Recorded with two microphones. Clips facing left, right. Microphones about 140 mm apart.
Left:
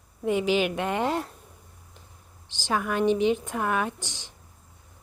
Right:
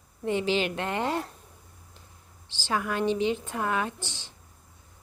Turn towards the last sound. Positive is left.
turn(degrees=15)  # may be behind; listen again after turning